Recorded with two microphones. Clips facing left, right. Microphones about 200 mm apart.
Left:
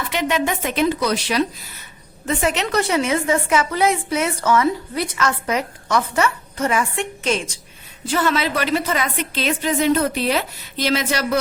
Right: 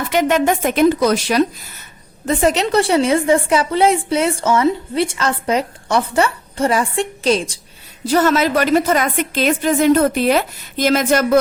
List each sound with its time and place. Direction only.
0.1 s a woman's voice: 45° right (ahead or behind)